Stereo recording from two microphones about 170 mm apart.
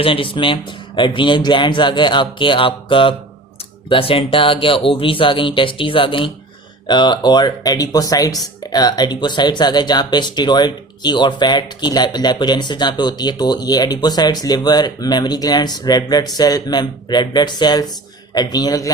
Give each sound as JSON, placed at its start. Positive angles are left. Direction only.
{"t": 0.0, "sound": "speech", "side_deg": 30}